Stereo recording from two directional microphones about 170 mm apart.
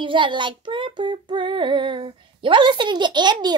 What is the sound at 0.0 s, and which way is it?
Female singing, 30° right (ahead or behind).